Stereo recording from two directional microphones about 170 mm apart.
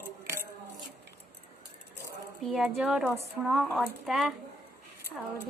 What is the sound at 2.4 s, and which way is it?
A woman's voice, centre (ahead or behind).